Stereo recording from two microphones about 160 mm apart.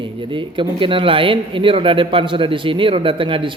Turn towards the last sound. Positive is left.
turn(degrees=-30)  # may be behind; listen again after turning